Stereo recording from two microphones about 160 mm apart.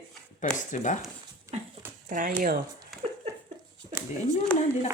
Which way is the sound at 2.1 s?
70° right (ahead or behind).